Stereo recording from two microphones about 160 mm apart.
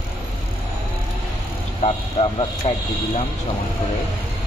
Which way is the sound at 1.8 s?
40° left (ahead or behind).